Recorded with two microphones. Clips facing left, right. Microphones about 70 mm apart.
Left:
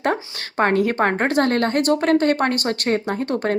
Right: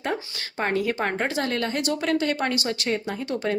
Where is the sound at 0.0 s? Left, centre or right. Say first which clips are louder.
Left 6 dB; left.